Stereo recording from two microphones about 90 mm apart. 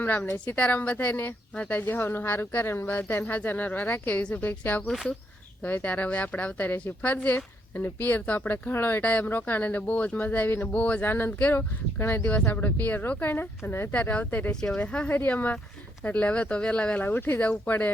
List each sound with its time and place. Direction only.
0.0 s a woman's voice: 20° left (ahead or behind)
14.5 s a woman's voice: 5° left (ahead or behind)